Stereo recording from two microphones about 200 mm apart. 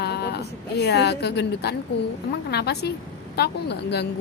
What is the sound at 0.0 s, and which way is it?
A woman's voice, 55° left (ahead or behind).